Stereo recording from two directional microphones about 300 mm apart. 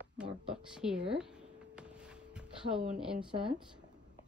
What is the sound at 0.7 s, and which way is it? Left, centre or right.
Speech, centre.